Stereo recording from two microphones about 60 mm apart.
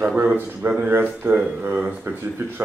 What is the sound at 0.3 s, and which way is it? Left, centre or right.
Speech, right.